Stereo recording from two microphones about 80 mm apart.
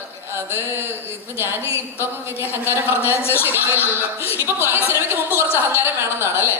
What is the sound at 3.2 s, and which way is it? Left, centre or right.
Speech, left.